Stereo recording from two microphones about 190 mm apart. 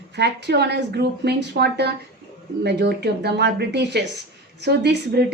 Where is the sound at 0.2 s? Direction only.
60° right (ahead or behind).